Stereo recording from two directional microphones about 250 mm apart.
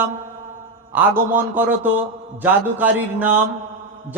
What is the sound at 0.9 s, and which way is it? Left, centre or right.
A man's voice, centre.